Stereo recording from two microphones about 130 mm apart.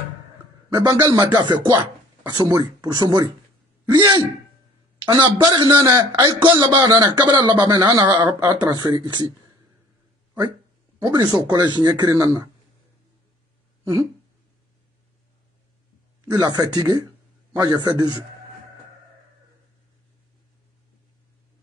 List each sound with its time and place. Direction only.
0.7 s speech: 30° right (ahead or behind)
11.0 s speech: 30° right (ahead or behind)
16.3 s speech: 30° right (ahead or behind)